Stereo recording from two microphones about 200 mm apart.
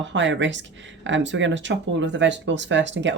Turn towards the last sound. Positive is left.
turn(degrees=-65)  # may be behind; listen again after turning